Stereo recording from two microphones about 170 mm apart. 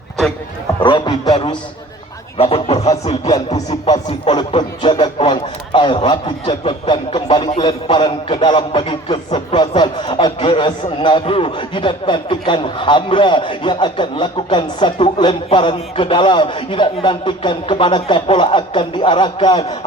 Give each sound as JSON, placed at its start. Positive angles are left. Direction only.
{"t": 0.8, "sound": "a man's voice", "side_deg": 25}
{"t": 2.4, "sound": "speech", "side_deg": 35}
{"t": 3.2, "sound": "a man's voice", "side_deg": 25}
{"t": 3.7, "sound": "speech", "side_deg": 40}
{"t": 4.3, "sound": "a man's voice", "side_deg": 25}